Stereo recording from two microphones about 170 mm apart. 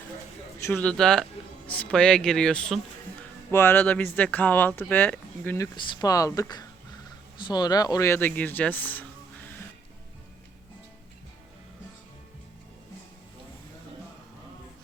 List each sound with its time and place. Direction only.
0.6 s speech: 10° left (ahead or behind)
5.7 s speech: 25° left (ahead or behind)